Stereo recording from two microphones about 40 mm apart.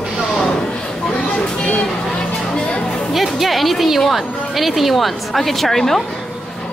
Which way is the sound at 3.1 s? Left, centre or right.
Centre.